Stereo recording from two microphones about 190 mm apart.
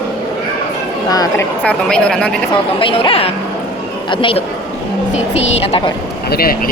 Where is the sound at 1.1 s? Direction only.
20° left (ahead or behind).